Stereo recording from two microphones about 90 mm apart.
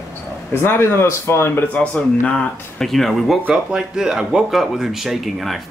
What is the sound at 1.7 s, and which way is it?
Speech, 15° left (ahead or behind).